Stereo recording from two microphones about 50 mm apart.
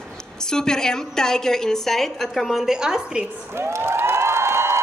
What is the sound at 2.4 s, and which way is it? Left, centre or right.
Speech, centre.